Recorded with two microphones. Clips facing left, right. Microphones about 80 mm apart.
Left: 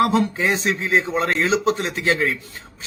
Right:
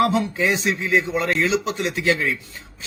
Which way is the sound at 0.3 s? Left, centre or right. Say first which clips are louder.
Even; left.